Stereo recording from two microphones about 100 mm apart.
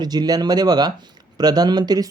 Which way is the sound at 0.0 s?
45° right (ahead or behind).